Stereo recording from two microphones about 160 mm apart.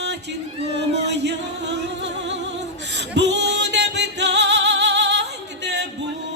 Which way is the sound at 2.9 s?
90° right.